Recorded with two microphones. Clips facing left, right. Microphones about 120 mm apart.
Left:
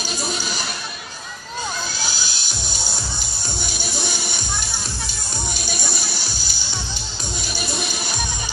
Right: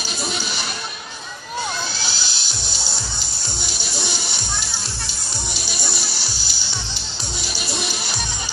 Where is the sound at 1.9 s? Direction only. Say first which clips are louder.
Left 1 dB; 45° left (ahead or behind).